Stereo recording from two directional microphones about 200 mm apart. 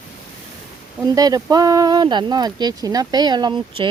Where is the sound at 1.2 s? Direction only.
20° right (ahead or behind).